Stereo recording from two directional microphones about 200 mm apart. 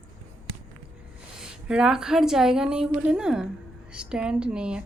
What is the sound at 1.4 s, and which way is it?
A woman's voice, 5° right (ahead or behind).